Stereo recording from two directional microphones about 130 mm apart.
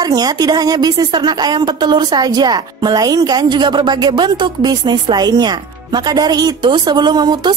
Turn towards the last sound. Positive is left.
turn(degrees=-35)  # may be behind; listen again after turning